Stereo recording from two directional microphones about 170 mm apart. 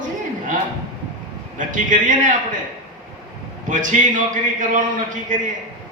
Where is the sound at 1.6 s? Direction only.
50° right (ahead or behind).